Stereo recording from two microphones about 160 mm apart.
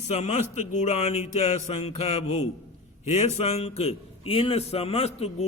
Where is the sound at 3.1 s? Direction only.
45° left (ahead or behind).